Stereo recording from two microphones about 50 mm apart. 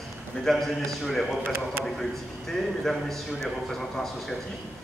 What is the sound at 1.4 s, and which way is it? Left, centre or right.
Speech, right.